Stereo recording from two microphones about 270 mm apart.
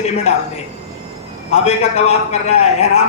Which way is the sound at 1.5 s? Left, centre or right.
Left.